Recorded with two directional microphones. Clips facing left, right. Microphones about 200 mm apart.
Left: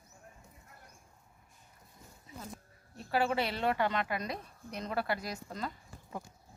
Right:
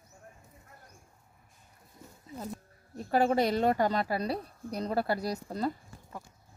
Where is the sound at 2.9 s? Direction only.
45° right (ahead or behind).